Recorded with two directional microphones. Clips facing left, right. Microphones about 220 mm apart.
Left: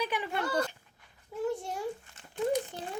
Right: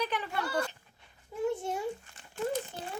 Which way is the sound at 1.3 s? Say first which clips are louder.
Right 1 dB; centre (ahead or behind).